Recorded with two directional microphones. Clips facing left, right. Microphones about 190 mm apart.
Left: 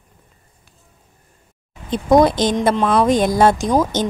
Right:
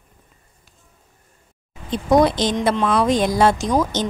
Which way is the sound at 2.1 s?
45° left (ahead or behind).